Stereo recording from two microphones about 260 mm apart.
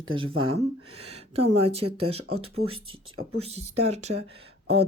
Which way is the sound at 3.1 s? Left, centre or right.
Right.